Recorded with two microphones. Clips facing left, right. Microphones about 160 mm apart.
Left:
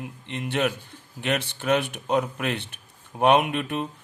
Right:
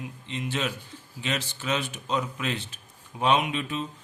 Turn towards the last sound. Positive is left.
turn(degrees=60)  # may be behind; listen again after turning